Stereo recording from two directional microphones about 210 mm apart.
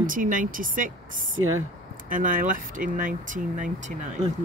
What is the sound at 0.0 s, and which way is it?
Speech, 40° right (ahead or behind).